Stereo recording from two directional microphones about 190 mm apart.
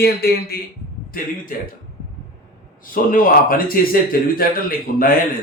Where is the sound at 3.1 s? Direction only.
50° left (ahead or behind).